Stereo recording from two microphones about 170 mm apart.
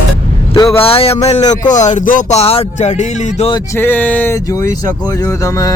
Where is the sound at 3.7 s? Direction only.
10° left (ahead or behind).